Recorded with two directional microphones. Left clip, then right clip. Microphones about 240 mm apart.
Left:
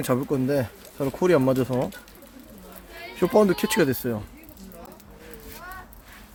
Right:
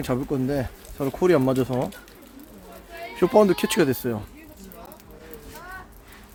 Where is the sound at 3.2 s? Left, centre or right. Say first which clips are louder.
Right 2 dB; centre.